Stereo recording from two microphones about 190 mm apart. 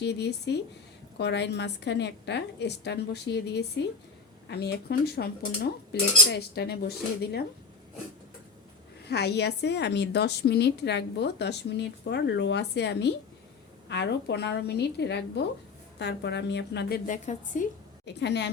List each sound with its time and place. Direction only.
0.0 s a woman's voice: 60° left (ahead or behind)
9.0 s a woman's voice: 60° left (ahead or behind)
17.1 s a woman's voice: 40° left (ahead or behind)
18.0 s a woman's voice: 65° left (ahead or behind)